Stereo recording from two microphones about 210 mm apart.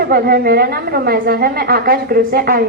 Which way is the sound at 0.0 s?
45° right (ahead or behind).